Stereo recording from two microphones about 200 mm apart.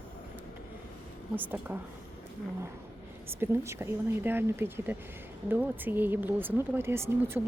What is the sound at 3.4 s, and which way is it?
Speech, 10° right (ahead or behind).